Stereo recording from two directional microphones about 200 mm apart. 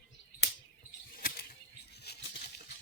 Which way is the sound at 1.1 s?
50° left (ahead or behind).